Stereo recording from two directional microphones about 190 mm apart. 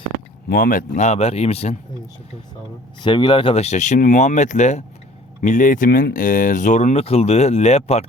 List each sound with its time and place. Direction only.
0.4 s speech: 50° left (ahead or behind); by 1.7 s 30° left (ahead or behind)
3.0 s speech: 25° left (ahead or behind)